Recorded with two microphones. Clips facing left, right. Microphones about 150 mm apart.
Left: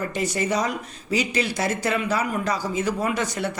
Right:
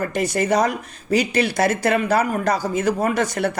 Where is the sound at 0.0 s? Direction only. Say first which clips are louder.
Right 4 dB; 55° right (ahead or behind).